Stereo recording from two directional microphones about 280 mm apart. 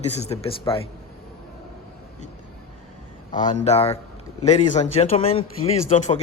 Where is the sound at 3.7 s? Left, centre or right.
Left.